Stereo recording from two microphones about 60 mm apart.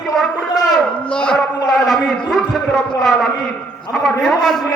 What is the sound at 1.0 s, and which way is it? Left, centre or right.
Speech, centre.